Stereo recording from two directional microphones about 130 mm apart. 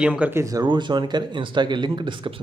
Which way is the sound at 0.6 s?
35° right (ahead or behind).